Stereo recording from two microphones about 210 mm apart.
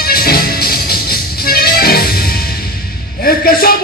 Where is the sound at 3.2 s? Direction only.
45° left (ahead or behind).